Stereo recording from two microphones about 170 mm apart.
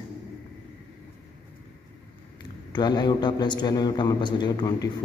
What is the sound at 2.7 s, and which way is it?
A man's voice, 25° left (ahead or behind).